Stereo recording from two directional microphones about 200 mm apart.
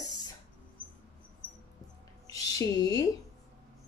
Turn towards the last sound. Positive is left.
turn(degrees=15)  # may be behind; listen again after turning